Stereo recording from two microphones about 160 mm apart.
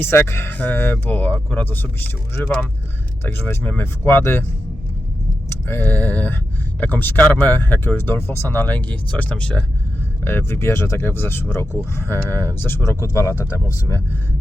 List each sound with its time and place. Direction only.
0.0 s speech: 15° left (ahead or behind)
5.5 s speech: 15° left (ahead or behind)